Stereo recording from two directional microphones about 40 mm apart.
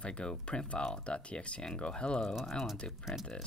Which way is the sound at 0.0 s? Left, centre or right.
Left.